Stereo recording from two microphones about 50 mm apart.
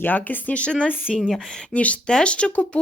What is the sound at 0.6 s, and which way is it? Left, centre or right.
Speech, left.